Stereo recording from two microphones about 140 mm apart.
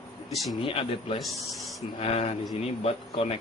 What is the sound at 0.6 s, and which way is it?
Speech, 40° left (ahead or behind).